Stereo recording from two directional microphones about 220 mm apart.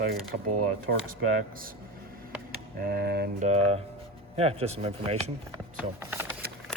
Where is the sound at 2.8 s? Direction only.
45° right (ahead or behind).